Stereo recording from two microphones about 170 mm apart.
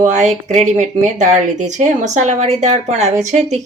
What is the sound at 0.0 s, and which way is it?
Speech, 45° right (ahead or behind).